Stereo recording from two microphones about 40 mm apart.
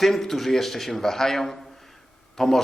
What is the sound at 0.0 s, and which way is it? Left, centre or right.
A man's voice, centre.